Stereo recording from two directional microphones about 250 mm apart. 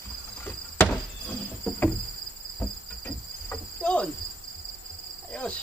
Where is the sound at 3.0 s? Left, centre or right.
Centre.